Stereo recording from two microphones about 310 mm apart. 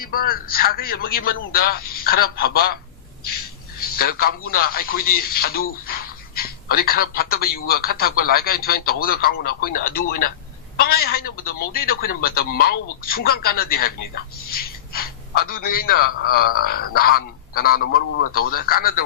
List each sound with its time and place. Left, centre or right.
0.0 s a man's voice: left
3.8 s a man's voice: left